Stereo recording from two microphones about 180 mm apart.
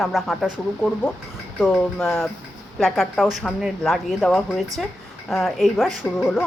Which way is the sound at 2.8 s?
Centre (ahead or behind).